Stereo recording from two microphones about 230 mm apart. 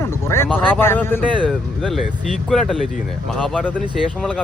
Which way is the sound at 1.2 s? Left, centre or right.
Centre.